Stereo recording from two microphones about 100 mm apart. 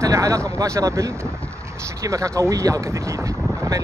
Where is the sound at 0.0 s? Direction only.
30° right (ahead or behind).